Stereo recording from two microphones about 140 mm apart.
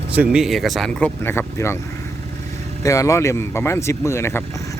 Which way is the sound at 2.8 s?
25° left (ahead or behind).